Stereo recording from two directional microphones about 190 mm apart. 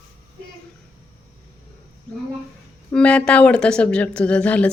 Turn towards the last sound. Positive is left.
turn(degrees=5)  # may be behind; listen again after turning